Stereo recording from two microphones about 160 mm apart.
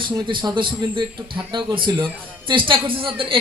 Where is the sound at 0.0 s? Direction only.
30° right (ahead or behind).